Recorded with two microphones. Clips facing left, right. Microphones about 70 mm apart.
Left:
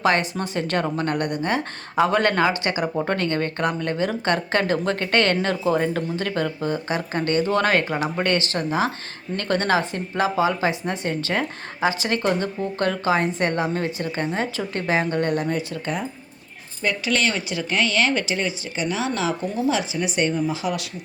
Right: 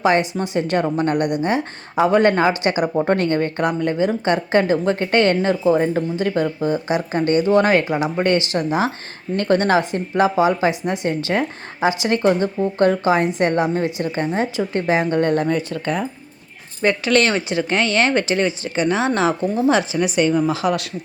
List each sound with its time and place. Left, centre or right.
0.3 s speech: centre; by 15.4 s right
15.4 s speech: right
19.9 s speech: right